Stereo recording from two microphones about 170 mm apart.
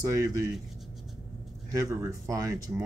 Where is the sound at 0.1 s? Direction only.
20° right (ahead or behind).